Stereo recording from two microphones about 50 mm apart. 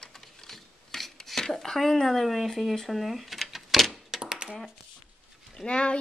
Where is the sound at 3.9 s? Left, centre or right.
Centre.